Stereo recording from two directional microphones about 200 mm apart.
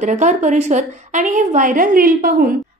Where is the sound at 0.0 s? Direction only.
35° right (ahead or behind).